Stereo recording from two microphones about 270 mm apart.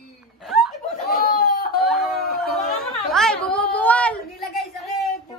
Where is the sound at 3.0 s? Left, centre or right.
Centre.